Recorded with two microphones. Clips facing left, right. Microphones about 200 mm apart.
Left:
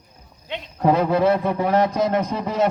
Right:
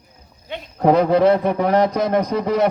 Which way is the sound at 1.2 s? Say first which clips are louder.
Right 3 dB; 15° right (ahead or behind).